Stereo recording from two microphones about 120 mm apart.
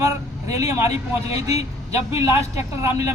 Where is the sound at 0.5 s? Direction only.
25° right (ahead or behind).